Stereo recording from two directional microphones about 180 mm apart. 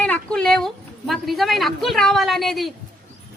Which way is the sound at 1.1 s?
Centre (ahead or behind).